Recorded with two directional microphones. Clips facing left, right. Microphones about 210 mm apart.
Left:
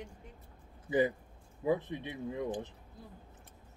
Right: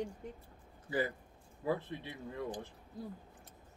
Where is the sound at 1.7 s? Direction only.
20° left (ahead or behind).